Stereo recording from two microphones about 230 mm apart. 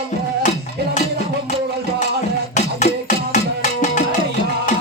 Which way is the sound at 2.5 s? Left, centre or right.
Left.